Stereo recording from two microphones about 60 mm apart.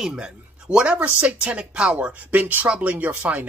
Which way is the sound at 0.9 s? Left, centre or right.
Right.